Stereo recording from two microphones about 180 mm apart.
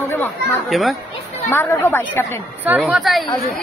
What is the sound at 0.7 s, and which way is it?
Speech, centre (ahead or behind).